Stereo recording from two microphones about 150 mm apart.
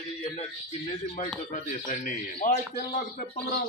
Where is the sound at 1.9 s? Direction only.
60° left (ahead or behind).